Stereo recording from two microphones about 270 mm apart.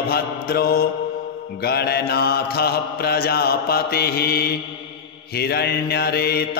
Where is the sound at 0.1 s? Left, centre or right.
Left.